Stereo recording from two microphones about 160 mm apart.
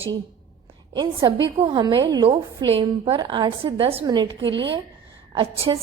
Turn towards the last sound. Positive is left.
turn(degrees=-35)  # may be behind; listen again after turning